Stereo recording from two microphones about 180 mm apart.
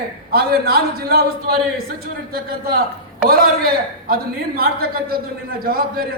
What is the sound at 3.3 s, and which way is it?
A man's voice, 55° right (ahead or behind).